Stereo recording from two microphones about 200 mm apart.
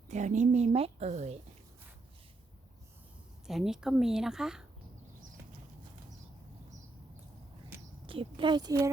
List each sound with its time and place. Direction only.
0.1 s a woman's voice: 35° right (ahead or behind)
3.4 s speech: centre (ahead or behind)
8.0 s speech: 25° right (ahead or behind)